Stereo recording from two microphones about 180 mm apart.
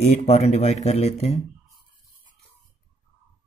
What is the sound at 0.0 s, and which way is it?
Speech, 40° left (ahead or behind).